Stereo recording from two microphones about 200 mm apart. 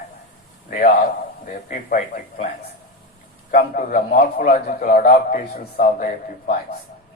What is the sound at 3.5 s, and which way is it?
A man's voice, 45° left (ahead or behind).